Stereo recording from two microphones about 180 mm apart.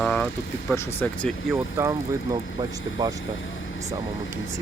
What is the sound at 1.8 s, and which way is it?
Speech, 20° right (ahead or behind).